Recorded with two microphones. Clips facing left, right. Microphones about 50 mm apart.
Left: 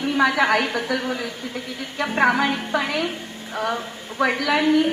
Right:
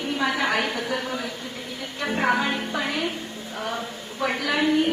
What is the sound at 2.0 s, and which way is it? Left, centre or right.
Speech, left.